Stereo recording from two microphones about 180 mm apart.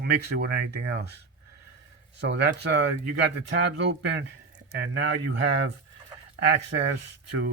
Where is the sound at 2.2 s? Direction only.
75° right (ahead or behind).